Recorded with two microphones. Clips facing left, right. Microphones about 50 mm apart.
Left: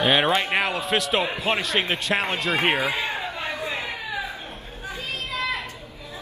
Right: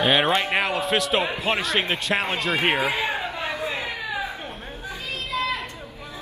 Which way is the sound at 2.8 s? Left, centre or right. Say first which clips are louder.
Right 1 dB; right.